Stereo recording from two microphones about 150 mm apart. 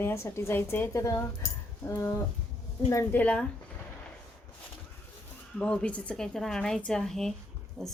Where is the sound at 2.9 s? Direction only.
10° left (ahead or behind).